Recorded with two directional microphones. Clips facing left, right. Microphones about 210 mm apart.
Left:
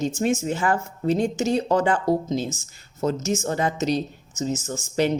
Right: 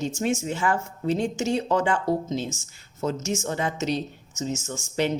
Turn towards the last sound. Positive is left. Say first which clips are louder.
# left 3 dB
turn(degrees=40)  # may be behind; listen again after turning